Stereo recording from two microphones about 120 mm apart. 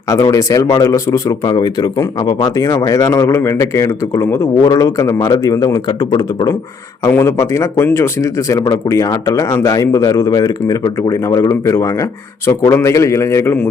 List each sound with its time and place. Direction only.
0.1 s speech: 30° left (ahead or behind)
7.1 s speech: 25° left (ahead or behind)